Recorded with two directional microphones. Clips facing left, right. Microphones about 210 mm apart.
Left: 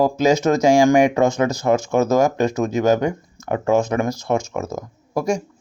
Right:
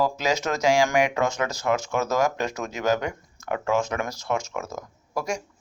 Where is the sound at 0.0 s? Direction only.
50° left (ahead or behind).